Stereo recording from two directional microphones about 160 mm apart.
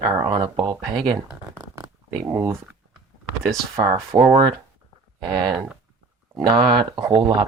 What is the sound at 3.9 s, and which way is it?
Speech, 35° right (ahead or behind).